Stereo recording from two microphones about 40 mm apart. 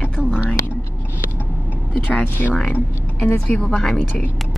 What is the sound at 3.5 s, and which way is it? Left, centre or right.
Speech, left.